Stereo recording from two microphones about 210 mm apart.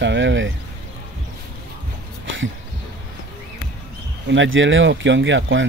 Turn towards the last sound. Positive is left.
turn(degrees=-60)  # may be behind; listen again after turning